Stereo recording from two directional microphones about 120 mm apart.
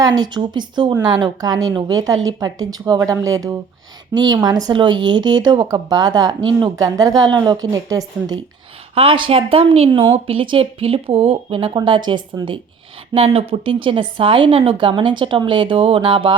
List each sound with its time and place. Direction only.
0.0 s speech: 35° right (ahead or behind)
9.0 s speech: 45° right (ahead or behind)